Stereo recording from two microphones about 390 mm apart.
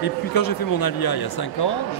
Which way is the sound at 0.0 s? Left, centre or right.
Left.